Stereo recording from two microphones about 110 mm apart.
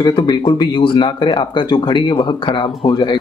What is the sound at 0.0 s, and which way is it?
Speech, 45° left (ahead or behind).